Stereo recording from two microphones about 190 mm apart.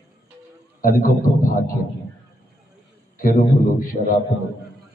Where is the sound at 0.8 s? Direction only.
45° left (ahead or behind).